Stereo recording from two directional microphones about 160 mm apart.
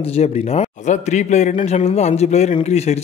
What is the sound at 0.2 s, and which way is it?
A man's voice, 40° left (ahead or behind).